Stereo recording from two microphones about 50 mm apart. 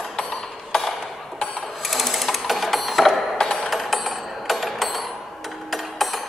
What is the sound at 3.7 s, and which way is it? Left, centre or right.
Music, centre.